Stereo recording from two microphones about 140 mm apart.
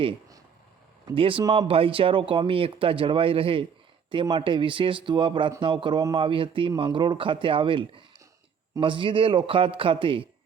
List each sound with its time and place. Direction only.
1.1 s speech: 40° right (ahead or behind)